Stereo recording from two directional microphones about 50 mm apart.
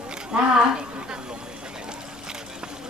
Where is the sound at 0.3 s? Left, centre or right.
Centre.